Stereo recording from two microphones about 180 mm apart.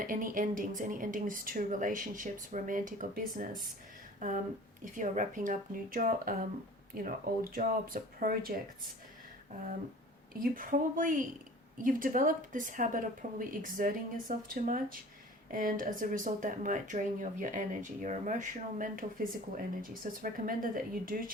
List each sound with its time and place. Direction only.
0.0 s speech: 50° right (ahead or behind)
4.9 s speech: 45° right (ahead or behind)
20.2 s speech: 50° right (ahead or behind)